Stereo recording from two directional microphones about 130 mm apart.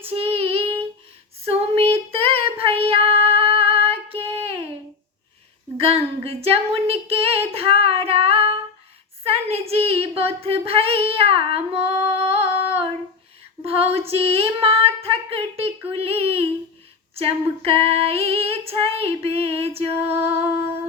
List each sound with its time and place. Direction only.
0.0 s child singing: 45° right (ahead or behind)
1.5 s female singing: 50° right (ahead or behind)
5.7 s a sound: 50° right (ahead or behind)
9.2 s speech: 50° right (ahead or behind)
11.9 s female singing: 50° right (ahead or behind)
13.7 s a sound: 50° right (ahead or behind)
15.9 s child singing: 50° right (ahead or behind)
17.2 s female singing: 45° right (ahead or behind)